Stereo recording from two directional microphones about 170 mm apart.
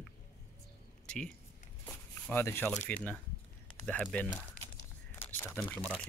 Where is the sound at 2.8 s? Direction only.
10° left (ahead or behind).